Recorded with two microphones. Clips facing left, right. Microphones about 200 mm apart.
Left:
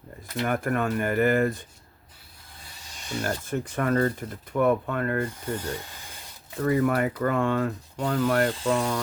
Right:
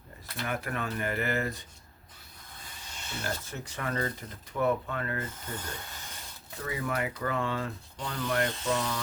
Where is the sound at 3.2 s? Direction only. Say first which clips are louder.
Left 8 dB; 50° left (ahead or behind).